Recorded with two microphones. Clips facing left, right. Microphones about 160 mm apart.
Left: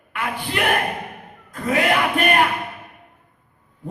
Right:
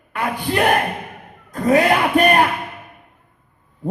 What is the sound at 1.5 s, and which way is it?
Speech, 40° right (ahead or behind).